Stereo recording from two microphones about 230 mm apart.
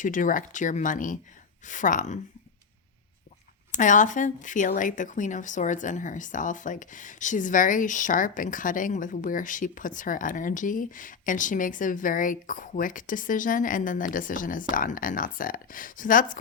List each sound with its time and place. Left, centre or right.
0.0 s speech: left
3.7 s speech: left